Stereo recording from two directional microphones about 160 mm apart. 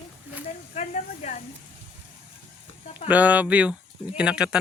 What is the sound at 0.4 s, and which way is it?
Speech, 45° left (ahead or behind).